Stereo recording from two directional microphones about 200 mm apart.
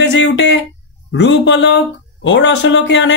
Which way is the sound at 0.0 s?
60° left (ahead or behind).